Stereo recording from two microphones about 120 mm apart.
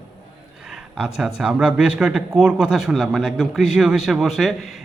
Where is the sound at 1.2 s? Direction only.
5° right (ahead or behind).